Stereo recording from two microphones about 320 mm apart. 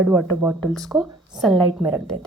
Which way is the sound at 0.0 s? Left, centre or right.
Centre.